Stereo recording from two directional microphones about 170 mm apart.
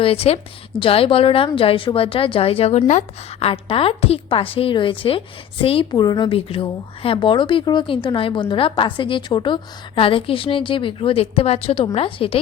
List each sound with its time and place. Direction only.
0.0 s speech: 35° left (ahead or behind)
3.4 s speech: 35° left (ahead or behind)